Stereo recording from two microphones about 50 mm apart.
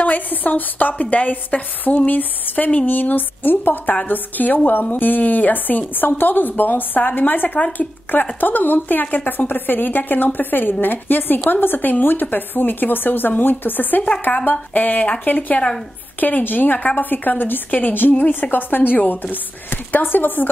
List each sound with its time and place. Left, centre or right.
0.0 s a woman's voice: left
7.4 s a woman's voice: left